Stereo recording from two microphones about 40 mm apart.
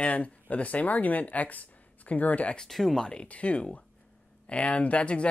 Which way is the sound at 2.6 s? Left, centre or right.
Centre.